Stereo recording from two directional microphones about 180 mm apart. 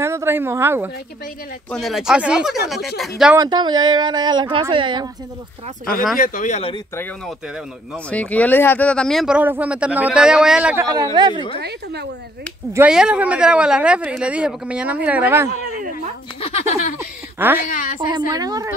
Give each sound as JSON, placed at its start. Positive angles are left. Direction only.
{"t": 0.0, "sound": "speech", "side_deg": -15}
{"t": 1.7, "sound": "speech", "side_deg": 0}
{"t": 3.3, "sound": "speech", "side_deg": -25}
{"t": 6.1, "sound": "speech", "side_deg": 50}
{"t": 7.9, "sound": "speech", "side_deg": 5}
{"t": 10.9, "sound": "speech", "side_deg": -25}
{"t": 11.6, "sound": "a woman's voice", "side_deg": -65}
{"t": 12.7, "sound": "speech", "side_deg": -5}
{"t": 16.3, "sound": "speech", "side_deg": 35}
{"t": 17.0, "sound": "a woman's voice", "side_deg": -10}
{"t": 17.6, "sound": "speech", "side_deg": 45}
{"t": 18.3, "sound": "speech", "side_deg": -20}